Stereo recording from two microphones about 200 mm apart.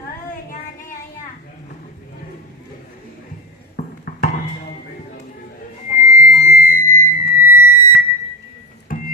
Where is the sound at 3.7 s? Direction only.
45° left (ahead or behind).